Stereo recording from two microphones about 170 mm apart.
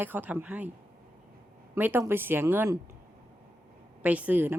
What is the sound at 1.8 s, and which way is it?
Speech, 10° right (ahead or behind).